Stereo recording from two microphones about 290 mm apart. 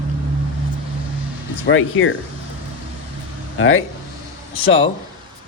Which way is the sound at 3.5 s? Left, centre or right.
Left.